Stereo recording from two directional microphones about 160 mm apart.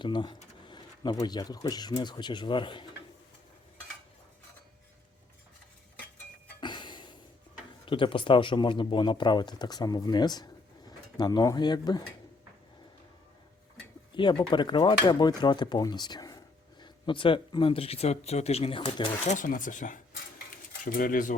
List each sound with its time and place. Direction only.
0.0 s speech: 30° left (ahead or behind)
6.6 s a sound: 30° left (ahead or behind)
7.9 s speech: 30° left (ahead or behind)
14.2 s speech: 30° left (ahead or behind)
19.3 s speech: 55° left (ahead or behind)